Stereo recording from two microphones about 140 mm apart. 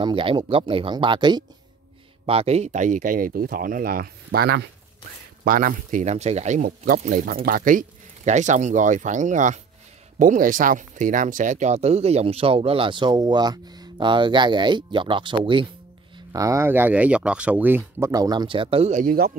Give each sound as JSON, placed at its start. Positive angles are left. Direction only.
{"t": 0.0, "sound": "speech", "side_deg": -40}
{"t": 2.2, "sound": "speech", "side_deg": -45}
{"t": 8.3, "sound": "speech", "side_deg": -60}
{"t": 10.1, "sound": "speech", "side_deg": -75}
{"t": 16.3, "sound": "speech", "side_deg": -25}
{"t": 18.1, "sound": "speech", "side_deg": -30}
{"t": 18.9, "sound": "speech", "side_deg": -90}